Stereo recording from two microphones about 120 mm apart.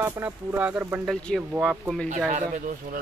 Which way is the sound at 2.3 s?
90° right.